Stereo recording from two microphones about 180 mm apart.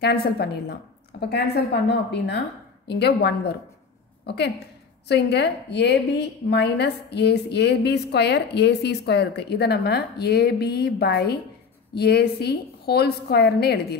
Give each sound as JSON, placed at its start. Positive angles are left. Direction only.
{"t": 0.0, "sound": "a woman's voice", "side_deg": 60}